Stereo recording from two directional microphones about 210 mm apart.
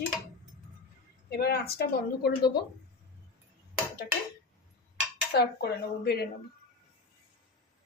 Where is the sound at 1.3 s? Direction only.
50° left (ahead or behind).